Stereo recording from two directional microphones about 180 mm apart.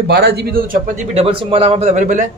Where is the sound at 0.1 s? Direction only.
65° right (ahead or behind).